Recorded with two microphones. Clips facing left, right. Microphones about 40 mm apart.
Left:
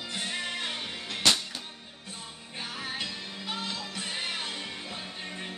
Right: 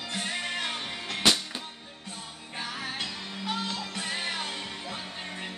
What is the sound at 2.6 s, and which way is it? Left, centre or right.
Music, right.